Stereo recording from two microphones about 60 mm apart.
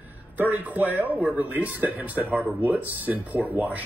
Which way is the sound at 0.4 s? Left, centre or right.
Right.